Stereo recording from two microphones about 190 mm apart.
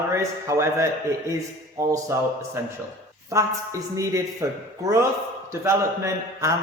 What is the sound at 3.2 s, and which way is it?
A man's voice, 15° right (ahead or behind).